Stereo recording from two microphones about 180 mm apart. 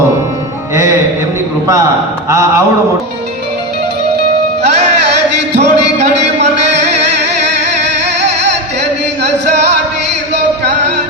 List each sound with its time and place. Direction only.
5.5 s music: 40° right (ahead or behind)
7.8 s music: 70° right (ahead or behind)
10.3 s music: 70° right (ahead or behind)